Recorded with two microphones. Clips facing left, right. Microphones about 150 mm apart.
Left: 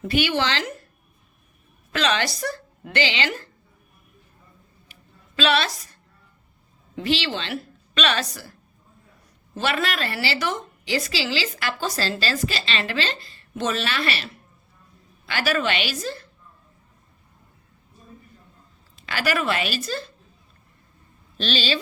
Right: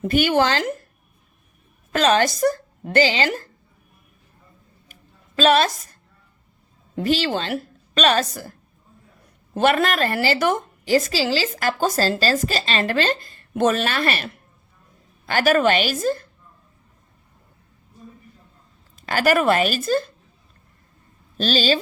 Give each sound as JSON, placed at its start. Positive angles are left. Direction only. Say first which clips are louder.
{"t": 0.0, "sound": "a woman's voice", "louder": "right 5 dB", "side_deg": -45}
{"t": 1.9, "sound": "speech", "louder": "right 6 dB", "side_deg": -45}
{"t": 5.4, "sound": "a woman's voice", "louder": "right 5 dB", "side_deg": -45}
{"t": 9.6, "sound": "a woman's voice", "louder": "right 7 dB", "side_deg": -50}
{"t": 18.9, "sound": "a woman's voice", "louder": "right 6 dB", "side_deg": -45}
{"t": 21.3, "sound": "a woman's voice", "louder": "right 5 dB", "side_deg": -40}